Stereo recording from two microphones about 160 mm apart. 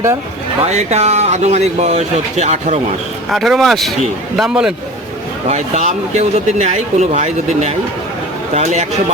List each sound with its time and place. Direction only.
0.6 s speech: 45° right (ahead or behind)
3.2 s speech: centre (ahead or behind)
5.5 s speech: 45° right (ahead or behind)